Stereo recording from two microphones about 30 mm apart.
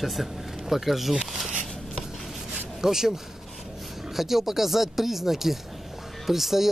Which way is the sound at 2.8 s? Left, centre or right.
Centre.